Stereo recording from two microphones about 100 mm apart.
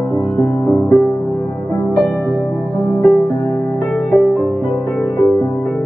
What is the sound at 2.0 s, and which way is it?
Music, 15° left (ahead or behind).